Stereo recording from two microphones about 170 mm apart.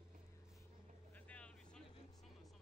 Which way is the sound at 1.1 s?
5° left (ahead or behind).